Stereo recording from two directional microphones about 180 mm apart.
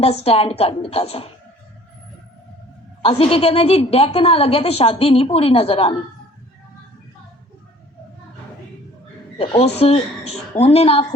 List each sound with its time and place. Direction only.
0.0 s a woman's voice: 35° left (ahead or behind)
3.0 s a woman's voice: 30° left (ahead or behind)
9.4 s a woman's voice: 35° left (ahead or behind)